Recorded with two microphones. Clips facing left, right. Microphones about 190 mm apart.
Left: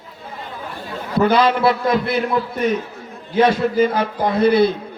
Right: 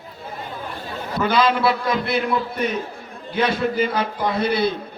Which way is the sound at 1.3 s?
50° left (ahead or behind).